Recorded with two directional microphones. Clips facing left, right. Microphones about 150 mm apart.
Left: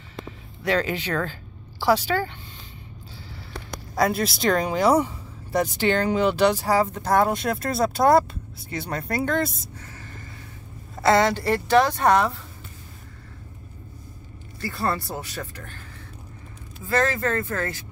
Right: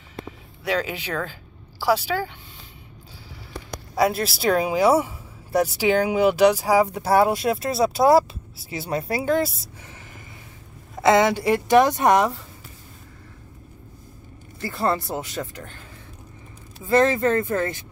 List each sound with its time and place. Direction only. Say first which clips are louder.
0.7 s speech: left 2 dB; 5° right (ahead or behind)
3.9 s speech: right 1 dB; 5° right (ahead or behind)
11.0 s a woman's voice: right 2 dB; 20° right (ahead or behind)
14.6 s speech: right 3 dB; 20° right (ahead or behind)
16.8 s speech: right 5 dB; 20° right (ahead or behind)